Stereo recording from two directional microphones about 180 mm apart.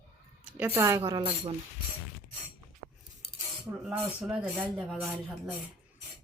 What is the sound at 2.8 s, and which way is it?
Cutlery, 65° right (ahead or behind).